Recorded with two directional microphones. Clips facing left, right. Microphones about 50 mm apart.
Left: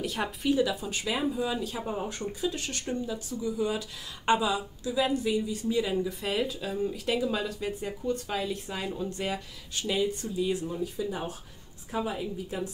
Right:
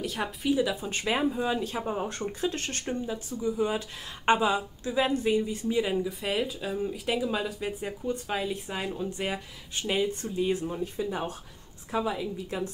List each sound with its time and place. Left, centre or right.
0.0 s speech: centre
0.6 s speech: right
0.8 s speech: right
2.0 s speech: right
2.9 s speech: right
6.0 s speech: centre; by 11.1 s right